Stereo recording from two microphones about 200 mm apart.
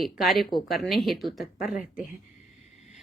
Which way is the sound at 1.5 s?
40° left (ahead or behind).